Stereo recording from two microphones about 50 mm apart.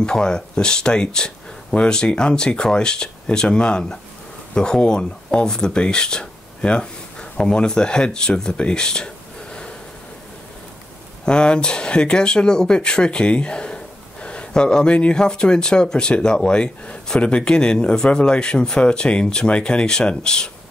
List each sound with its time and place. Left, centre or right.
0.0 s speech: centre
11.2 s speech: centre
14.2 s a sound: left
15.1 s speech: centre